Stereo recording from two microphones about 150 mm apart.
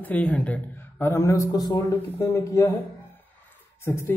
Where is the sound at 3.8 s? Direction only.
15° left (ahead or behind).